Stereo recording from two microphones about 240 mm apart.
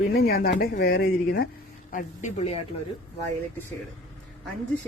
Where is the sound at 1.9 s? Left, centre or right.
Left.